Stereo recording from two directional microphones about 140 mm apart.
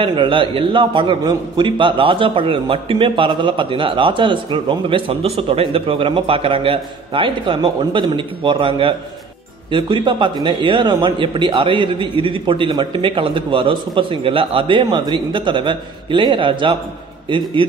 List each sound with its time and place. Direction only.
0.0 s a man's voice: 35° right (ahead or behind)